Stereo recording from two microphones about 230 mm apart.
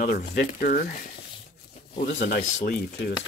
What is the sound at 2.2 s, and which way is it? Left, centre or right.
Speech, left.